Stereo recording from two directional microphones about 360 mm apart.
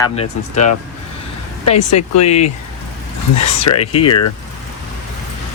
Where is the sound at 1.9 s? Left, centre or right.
Left.